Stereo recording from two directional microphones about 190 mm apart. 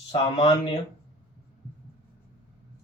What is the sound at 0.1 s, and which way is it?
Speech, 35° left (ahead or behind).